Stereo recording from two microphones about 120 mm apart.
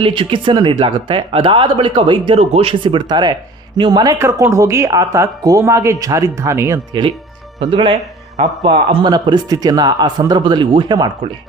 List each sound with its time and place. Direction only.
0.0 s speech: 45° right (ahead or behind); by 6.7 s 25° right (ahead or behind)
7.6 s speech: 45° right (ahead or behind)
9.0 s speech: 40° right (ahead or behind)